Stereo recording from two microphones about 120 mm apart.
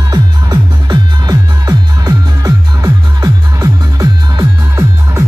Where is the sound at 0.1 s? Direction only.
35° right (ahead or behind).